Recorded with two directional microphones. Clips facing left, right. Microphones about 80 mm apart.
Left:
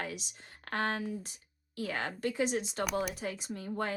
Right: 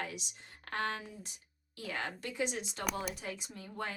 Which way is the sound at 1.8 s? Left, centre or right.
Left.